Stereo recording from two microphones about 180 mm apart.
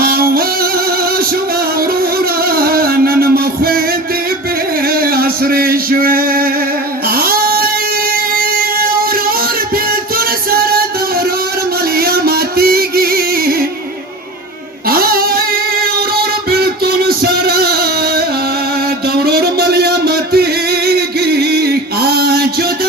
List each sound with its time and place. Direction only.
0.0 s music: 55° right (ahead or behind)
2.4 s music: 55° right (ahead or behind)
4.8 s male singing: 55° right (ahead or behind)
7.1 s a sound: 55° right (ahead or behind)
8.1 s music: 55° right (ahead or behind)
14.8 s female singing: 55° right (ahead or behind)
16.5 s music: 60° right (ahead or behind)